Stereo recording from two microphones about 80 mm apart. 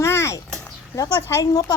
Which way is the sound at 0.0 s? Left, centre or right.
Left.